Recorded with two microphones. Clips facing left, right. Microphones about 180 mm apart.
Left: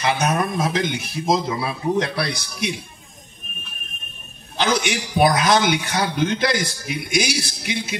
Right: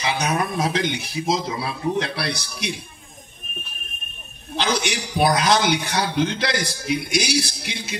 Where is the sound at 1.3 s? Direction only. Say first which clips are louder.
Left 4 dB; 60° left (ahead or behind).